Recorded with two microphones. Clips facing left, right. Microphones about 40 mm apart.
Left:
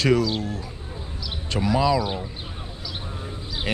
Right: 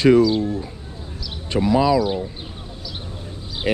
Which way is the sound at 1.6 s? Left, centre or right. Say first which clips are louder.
Right 4 dB; centre.